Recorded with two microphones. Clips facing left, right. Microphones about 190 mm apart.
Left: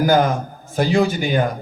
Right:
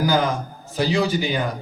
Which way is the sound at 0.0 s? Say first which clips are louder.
Left 4 dB; 50° left (ahead or behind).